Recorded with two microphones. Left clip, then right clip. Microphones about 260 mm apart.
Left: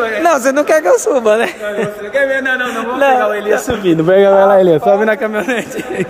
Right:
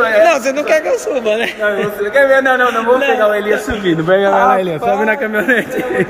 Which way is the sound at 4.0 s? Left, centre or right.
Left.